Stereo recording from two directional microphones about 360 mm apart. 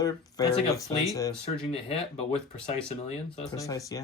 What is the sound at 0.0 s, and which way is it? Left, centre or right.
Speech, centre.